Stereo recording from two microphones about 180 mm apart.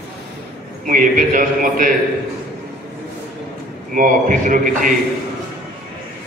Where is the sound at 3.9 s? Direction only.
45° right (ahead or behind).